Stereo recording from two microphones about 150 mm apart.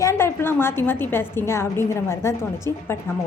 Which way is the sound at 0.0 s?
15° left (ahead or behind).